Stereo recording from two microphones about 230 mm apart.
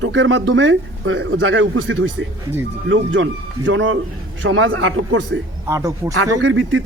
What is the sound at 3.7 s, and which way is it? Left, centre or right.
A man's voice, right.